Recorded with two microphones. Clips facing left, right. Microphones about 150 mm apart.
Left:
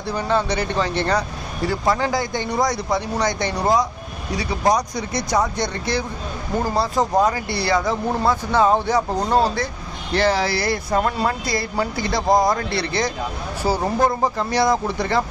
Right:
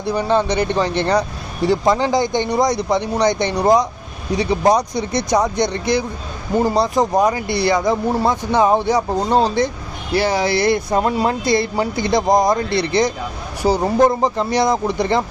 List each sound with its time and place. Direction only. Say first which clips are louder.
0.0 s speech: right 4 dB; 15° right (ahead or behind)